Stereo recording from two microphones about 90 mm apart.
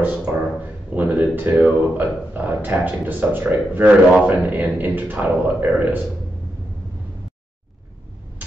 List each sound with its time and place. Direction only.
0.0 s speech: 15° right (ahead or behind)